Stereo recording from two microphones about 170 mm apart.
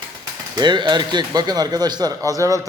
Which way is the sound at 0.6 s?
25° right (ahead or behind).